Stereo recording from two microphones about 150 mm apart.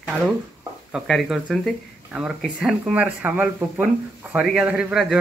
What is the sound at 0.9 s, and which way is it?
Speech, centre (ahead or behind).